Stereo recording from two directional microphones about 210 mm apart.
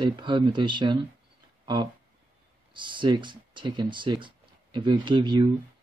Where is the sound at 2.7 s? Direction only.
20° right (ahead or behind).